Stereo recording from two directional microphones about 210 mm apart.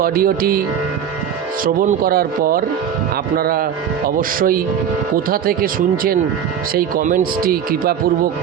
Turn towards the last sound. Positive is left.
turn(degrees=-45)  # may be behind; listen again after turning